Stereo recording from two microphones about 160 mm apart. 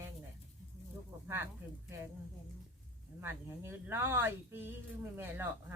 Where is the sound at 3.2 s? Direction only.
15° right (ahead or behind).